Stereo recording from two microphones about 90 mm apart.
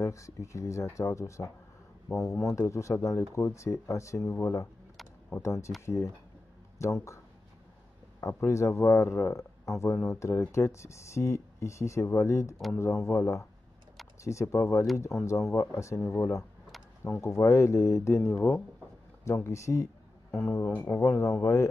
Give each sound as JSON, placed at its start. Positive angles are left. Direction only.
{"t": 0.0, "sound": "speech", "side_deg": 35}
{"t": 8.2, "sound": "speech", "side_deg": 30}